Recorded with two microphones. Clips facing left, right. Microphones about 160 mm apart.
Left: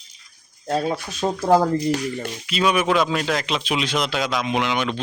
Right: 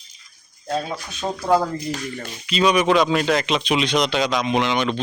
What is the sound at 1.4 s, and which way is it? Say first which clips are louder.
Speech: left 2 dB; 40° left (ahead or behind).